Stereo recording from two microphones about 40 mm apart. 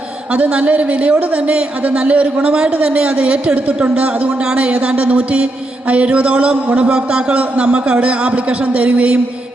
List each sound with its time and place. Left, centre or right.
0.3 s speech: right